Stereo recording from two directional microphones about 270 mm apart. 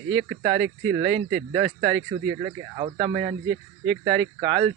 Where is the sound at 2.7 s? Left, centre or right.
Centre.